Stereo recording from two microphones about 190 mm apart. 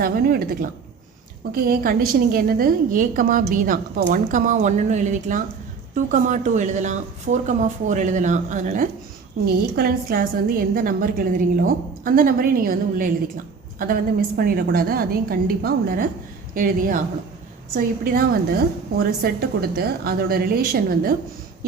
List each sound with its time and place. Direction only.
0.0 s a woman's voice: 50° right (ahead or behind)